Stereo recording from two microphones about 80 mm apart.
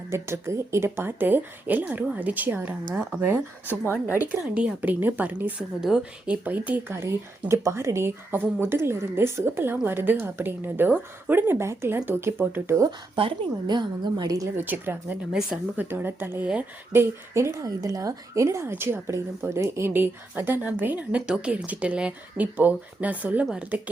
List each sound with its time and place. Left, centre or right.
0.1 s a woman's voice: right
6.9 s a woman's voice: right
13.1 s a woman's voice: right
14.5 s a woman's voice: right
15.3 s a woman's voice: centre
15.8 s a woman's voice: right